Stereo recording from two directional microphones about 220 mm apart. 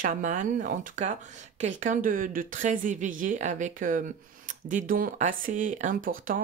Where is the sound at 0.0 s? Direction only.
35° right (ahead or behind).